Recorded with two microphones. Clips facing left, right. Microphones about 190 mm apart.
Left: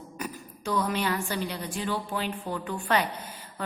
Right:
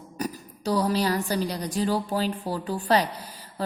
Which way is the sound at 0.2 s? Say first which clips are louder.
Right 6 dB; 35° right (ahead or behind).